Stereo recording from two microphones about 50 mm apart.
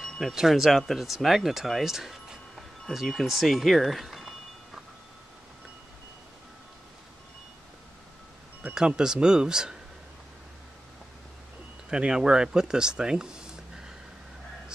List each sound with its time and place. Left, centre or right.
0.3 s speech: centre
8.7 s speech: centre
11.9 s speech: centre